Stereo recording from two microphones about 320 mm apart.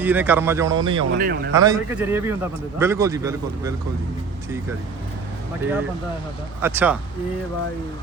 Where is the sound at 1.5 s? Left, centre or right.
Centre.